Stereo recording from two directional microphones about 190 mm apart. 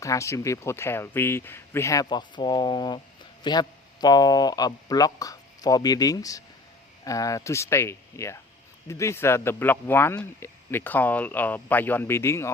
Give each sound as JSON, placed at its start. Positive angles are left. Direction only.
{"t": 0.0, "sound": "speech", "side_deg": 15}